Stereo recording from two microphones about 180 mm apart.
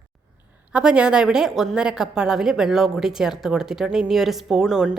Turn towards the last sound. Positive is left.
turn(degrees=0)  # may be behind; listen again after turning